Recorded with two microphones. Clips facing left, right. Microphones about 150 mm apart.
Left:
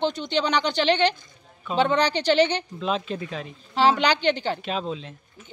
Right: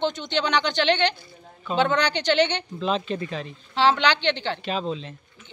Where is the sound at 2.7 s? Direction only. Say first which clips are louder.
Right 1 dB; centre (ahead or behind).